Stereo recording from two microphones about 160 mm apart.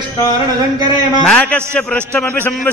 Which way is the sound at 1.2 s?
5° left (ahead or behind).